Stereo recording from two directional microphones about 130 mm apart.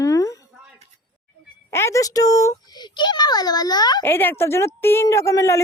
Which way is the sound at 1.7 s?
20° left (ahead or behind).